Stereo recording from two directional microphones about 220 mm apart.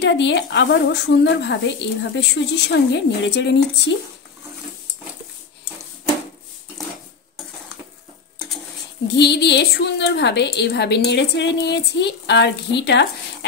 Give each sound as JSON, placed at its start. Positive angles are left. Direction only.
{"t": 0.0, "sound": "speech", "side_deg": 55}
{"t": 9.0, "sound": "speech", "side_deg": 50}